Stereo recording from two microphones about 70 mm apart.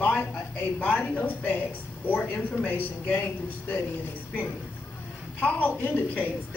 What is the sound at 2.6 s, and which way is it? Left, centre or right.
Speech, left.